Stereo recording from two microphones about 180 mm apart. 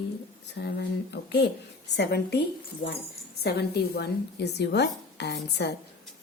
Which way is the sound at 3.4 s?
65° left (ahead or behind).